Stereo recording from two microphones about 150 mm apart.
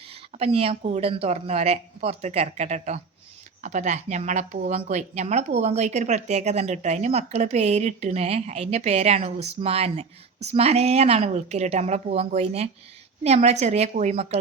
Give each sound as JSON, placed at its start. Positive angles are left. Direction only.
{"t": 0.1, "sound": "speech", "side_deg": -40}